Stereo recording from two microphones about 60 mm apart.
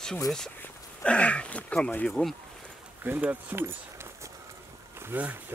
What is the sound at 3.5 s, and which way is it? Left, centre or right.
Keys jangling, right.